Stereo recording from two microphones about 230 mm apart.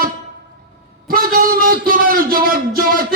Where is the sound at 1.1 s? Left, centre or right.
Right.